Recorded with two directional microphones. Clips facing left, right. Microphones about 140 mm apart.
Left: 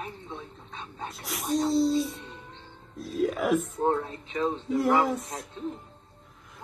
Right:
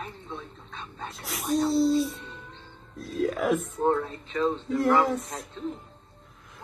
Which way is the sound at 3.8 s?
20° left (ahead or behind).